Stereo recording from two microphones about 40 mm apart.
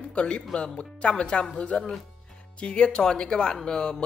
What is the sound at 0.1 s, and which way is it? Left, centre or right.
Speech, left.